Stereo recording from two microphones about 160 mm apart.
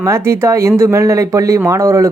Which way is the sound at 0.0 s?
15° right (ahead or behind).